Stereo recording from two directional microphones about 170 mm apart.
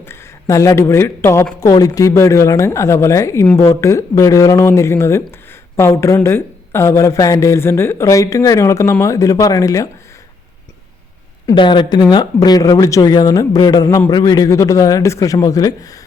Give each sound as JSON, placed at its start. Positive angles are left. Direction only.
{"t": 0.0, "sound": "speech", "side_deg": 15}
{"t": 11.5, "sound": "speech", "side_deg": 25}